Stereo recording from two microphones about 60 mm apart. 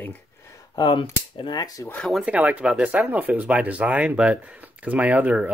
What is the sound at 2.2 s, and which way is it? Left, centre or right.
Speech, right.